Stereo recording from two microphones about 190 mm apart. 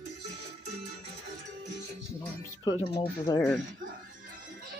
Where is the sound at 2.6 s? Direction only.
25° left (ahead or behind).